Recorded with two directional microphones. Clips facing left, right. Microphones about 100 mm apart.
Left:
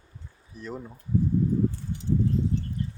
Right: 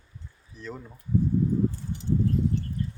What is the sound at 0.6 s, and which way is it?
Speech, 15° left (ahead or behind).